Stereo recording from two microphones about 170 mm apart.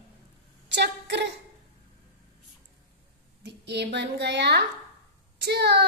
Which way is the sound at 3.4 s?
90° right.